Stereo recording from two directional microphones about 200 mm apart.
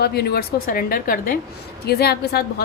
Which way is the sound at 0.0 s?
55° left (ahead or behind).